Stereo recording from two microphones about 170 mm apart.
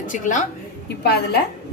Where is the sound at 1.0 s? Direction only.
70° left (ahead or behind).